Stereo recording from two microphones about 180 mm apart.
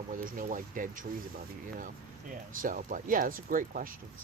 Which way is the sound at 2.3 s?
50° right (ahead or behind).